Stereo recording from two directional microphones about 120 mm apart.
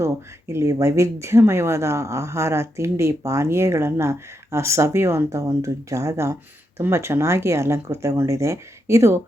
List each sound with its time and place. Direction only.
0.0 s speech: 25° right (ahead or behind)